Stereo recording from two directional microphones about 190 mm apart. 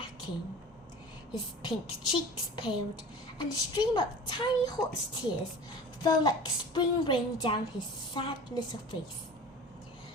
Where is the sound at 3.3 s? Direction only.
20° left (ahead or behind).